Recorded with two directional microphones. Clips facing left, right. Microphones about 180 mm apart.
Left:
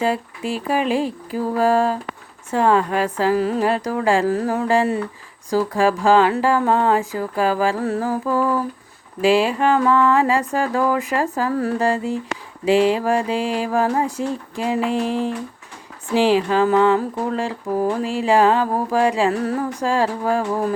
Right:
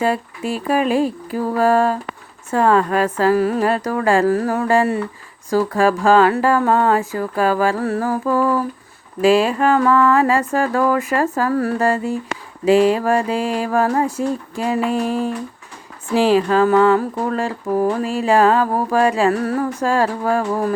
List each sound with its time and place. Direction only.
0.0 s speech: 15° left (ahead or behind)
14.8 s a sound: 15° right (ahead or behind)
16.1 s speech: 15° left (ahead or behind)